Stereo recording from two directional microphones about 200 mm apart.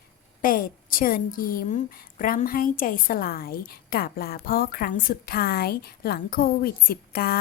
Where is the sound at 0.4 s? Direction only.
45° left (ahead or behind).